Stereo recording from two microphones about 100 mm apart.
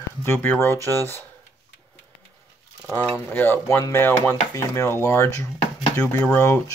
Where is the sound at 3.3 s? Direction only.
20° left (ahead or behind).